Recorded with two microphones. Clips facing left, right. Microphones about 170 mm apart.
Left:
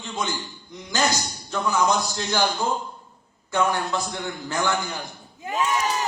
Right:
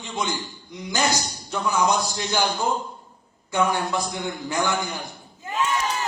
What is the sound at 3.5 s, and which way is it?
A man's voice, 15° right (ahead or behind).